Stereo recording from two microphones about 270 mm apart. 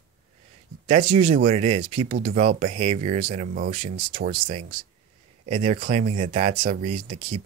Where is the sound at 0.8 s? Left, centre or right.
Right.